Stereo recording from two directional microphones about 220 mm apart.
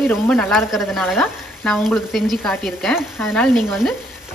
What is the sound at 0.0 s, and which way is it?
Speech, centre (ahead or behind).